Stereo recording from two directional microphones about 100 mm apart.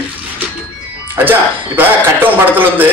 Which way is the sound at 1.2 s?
20° right (ahead or behind).